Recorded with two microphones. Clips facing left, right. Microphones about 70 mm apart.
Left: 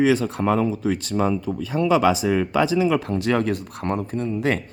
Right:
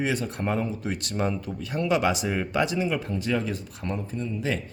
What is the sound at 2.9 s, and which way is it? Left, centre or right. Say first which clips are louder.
Speech: left 6 dB; left.